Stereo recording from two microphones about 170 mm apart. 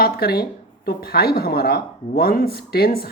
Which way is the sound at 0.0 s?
65° left (ahead or behind).